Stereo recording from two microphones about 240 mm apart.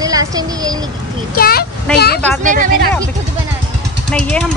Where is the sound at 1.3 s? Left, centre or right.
Left.